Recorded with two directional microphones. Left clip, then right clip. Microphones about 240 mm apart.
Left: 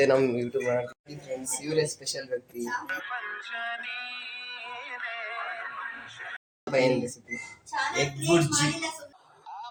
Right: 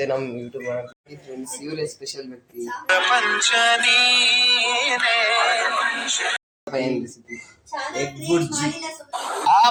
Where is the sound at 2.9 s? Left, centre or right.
Right.